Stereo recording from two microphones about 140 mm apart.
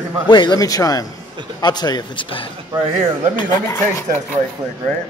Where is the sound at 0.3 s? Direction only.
30° left (ahead or behind).